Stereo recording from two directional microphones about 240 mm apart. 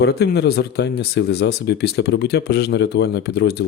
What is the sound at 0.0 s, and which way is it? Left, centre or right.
Speech, left.